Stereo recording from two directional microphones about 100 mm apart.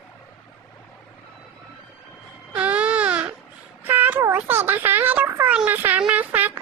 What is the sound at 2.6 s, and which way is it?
Baby cry, 15° right (ahead or behind).